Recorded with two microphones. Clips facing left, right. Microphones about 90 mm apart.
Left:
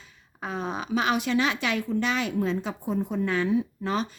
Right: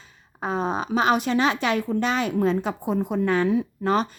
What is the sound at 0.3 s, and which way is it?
Speech, 35° right (ahead or behind).